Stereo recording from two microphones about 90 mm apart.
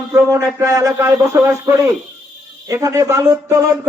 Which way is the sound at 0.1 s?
35° right (ahead or behind).